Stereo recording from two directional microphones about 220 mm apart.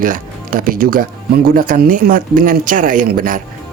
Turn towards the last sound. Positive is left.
turn(degrees=-40)  # may be behind; listen again after turning